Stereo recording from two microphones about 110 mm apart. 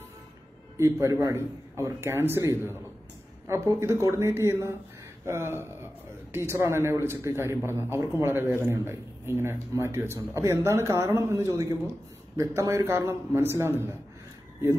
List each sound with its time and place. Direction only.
0.7 s speech: 25° right (ahead or behind)
3.4 s speech: 25° right (ahead or behind)